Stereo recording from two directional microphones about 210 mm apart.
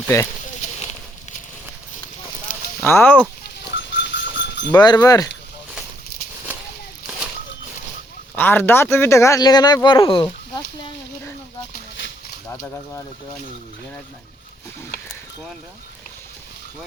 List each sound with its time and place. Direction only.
0.1 s speech: 15° left (ahead or behind)
2.5 s a sound: 35° left (ahead or behind)
2.8 s speech: 10° left (ahead or behind)
3.4 s livestock: 55° left (ahead or behind)
5.0 s speech: 15° left (ahead or behind)
8.4 s speech: 10° left (ahead or behind)
11.7 s a sound: 60° left (ahead or behind)
12.5 s speech: 10° left (ahead or behind)